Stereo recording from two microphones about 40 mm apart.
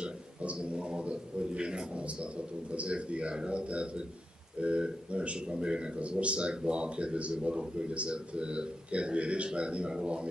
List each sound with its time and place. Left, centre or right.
0.0 s speech: right